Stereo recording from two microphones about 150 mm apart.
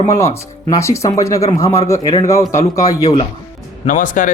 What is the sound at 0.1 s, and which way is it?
Speech, 20° left (ahead or behind).